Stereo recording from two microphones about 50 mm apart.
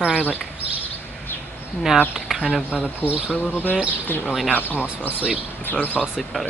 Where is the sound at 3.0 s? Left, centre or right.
Right.